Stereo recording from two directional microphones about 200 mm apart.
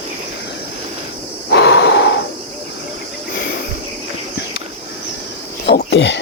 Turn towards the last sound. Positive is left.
turn(degrees=60)  # may be behind; listen again after turning